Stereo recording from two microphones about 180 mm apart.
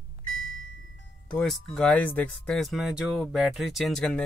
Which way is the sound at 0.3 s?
90° left.